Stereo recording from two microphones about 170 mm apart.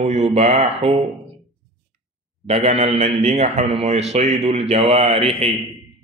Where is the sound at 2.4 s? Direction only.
40° right (ahead or behind).